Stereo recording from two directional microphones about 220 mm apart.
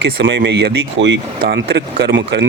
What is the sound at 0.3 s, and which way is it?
Speech, 55° right (ahead or behind).